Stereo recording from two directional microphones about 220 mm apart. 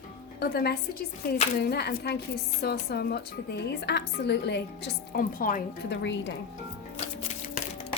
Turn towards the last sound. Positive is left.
turn(degrees=30)  # may be behind; listen again after turning